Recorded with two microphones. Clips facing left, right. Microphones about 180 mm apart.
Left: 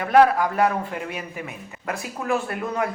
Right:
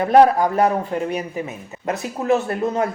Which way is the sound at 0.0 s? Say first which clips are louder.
Right 3 dB; 30° right (ahead or behind).